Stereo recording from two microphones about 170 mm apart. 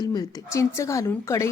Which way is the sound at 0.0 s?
20° left (ahead or behind).